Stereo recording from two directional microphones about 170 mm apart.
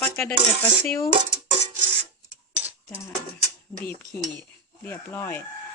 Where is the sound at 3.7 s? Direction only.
5° left (ahead or behind).